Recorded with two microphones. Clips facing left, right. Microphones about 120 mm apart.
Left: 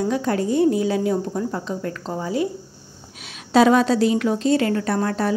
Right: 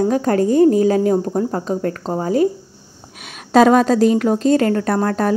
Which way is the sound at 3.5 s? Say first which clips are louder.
Right 4 dB; 45° right (ahead or behind).